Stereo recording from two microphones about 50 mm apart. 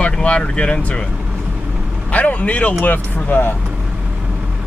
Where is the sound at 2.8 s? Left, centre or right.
Left.